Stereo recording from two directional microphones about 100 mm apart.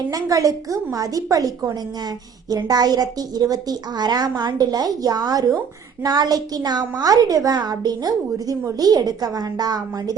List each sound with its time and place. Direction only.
0.1 s a woman's voice: 40° right (ahead or behind)